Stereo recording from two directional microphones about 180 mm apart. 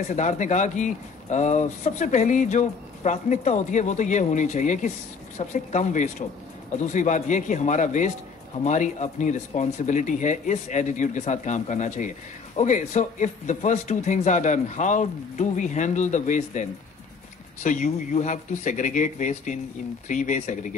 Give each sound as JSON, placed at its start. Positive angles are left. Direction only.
{"t": 0.1, "sound": "speech", "side_deg": 40}
{"t": 17.6, "sound": "speech", "side_deg": 45}